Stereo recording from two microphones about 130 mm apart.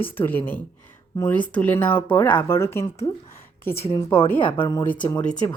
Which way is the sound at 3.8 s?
45° left (ahead or behind).